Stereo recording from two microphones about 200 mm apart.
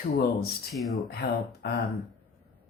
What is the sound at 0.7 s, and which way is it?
Speech, centre (ahead or behind).